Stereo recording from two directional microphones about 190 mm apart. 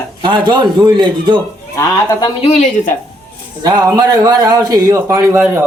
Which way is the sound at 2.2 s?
30° left (ahead or behind).